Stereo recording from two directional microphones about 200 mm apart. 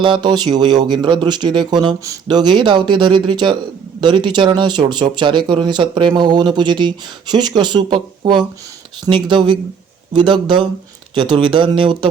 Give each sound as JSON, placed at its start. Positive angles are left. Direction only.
{"t": 0.0, "sound": "speech", "side_deg": -25}